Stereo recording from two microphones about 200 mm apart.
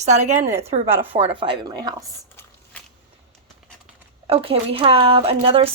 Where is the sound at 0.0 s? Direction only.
35° right (ahead or behind).